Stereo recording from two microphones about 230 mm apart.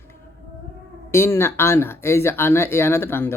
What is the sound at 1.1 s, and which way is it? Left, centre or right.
Speech, centre.